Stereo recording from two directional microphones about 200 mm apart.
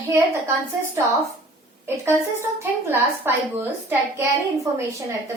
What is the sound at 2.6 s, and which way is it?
Speech, 10° right (ahead or behind).